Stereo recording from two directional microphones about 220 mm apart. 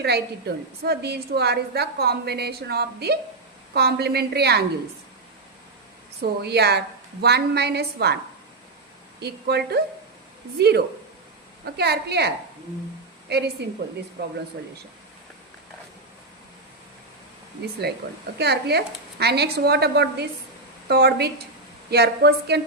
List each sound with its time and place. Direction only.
0.0 s a woman's voice: 50° right (ahead or behind)
6.4 s a woman's voice: 50° right (ahead or behind)
9.2 s a woman's voice: 50° right (ahead or behind)
18.3 s a woman's voice: 50° right (ahead or behind)